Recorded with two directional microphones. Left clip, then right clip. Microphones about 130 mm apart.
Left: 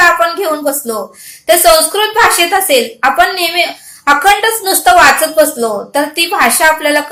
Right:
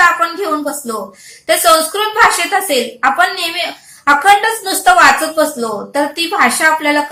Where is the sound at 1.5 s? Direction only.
35° left (ahead or behind).